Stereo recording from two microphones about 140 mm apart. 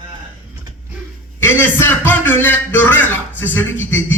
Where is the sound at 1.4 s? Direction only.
15° left (ahead or behind).